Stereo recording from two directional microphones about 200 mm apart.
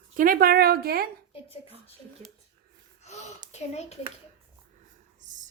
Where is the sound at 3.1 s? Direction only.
35° left (ahead or behind).